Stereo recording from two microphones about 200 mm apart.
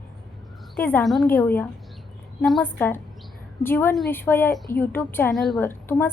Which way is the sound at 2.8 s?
10° left (ahead or behind).